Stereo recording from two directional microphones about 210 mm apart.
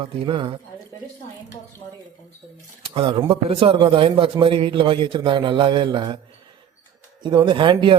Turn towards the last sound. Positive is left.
turn(degrees=-25)  # may be behind; listen again after turning